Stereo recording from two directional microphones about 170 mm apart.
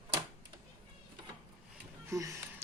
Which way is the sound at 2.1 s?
20° right (ahead or behind).